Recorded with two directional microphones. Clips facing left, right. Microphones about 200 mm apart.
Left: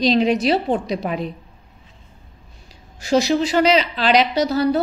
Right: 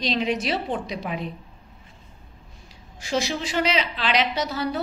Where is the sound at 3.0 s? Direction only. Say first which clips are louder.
Left 9 dB; 40° left (ahead or behind).